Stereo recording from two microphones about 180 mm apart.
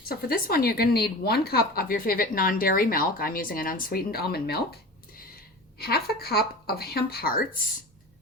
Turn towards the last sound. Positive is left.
turn(degrees=55)  # may be behind; listen again after turning